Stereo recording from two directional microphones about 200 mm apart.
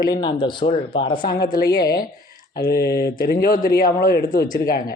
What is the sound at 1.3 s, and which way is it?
Speech, 50° left (ahead or behind).